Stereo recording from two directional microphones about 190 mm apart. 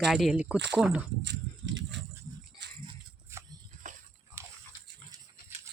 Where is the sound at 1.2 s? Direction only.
70° right (ahead or behind).